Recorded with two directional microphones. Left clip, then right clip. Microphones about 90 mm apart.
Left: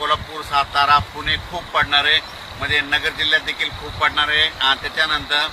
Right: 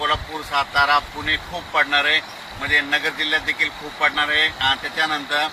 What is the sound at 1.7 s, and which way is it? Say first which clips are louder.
Speech: left 1 dB; 35° left (ahead or behind).